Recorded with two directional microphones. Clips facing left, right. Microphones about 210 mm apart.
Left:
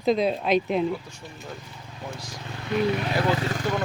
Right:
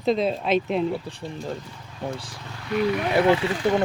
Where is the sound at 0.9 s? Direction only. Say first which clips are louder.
Right 3 dB; 35° right (ahead or behind).